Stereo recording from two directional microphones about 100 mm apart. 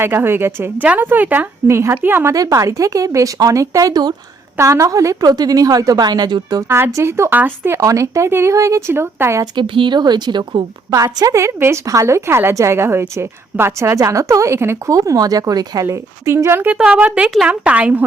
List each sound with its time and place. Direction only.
0.0 s a woman's voice: 20° right (ahead or behind)
1.7 s a woman's voice: 30° right (ahead or behind)
2.3 s a woman's voice: 35° right (ahead or behind)
6.7 s a woman's voice: 25° right (ahead or behind)
9.6 s speech: 55° right (ahead or behind)
10.9 s a woman's voice: 35° right (ahead or behind)
16.7 s a woman's voice: 10° right (ahead or behind)